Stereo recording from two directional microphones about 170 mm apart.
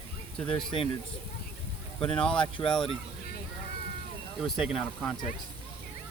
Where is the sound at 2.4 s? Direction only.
30° left (ahead or behind).